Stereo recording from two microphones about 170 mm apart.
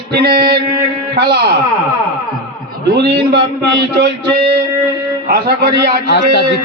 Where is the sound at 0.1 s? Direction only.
65° right (ahead or behind).